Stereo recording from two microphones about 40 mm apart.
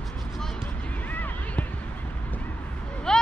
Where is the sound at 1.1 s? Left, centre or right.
Left.